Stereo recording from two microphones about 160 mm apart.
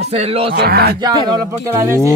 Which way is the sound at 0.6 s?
75° right (ahead or behind).